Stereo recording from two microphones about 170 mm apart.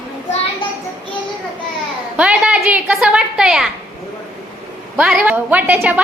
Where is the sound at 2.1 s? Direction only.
5° right (ahead or behind).